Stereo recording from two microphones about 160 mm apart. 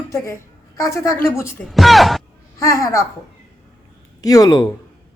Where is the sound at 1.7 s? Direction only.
Centre (ahead or behind).